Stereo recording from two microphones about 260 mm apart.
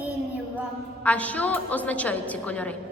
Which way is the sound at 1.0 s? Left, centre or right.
Centre.